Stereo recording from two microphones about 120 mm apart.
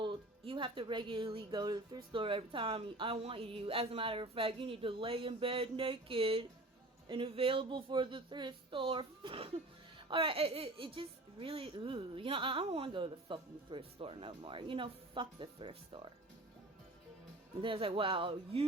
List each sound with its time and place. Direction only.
0.0 s speech: 40° right (ahead or behind)
17.6 s speech: 45° right (ahead or behind)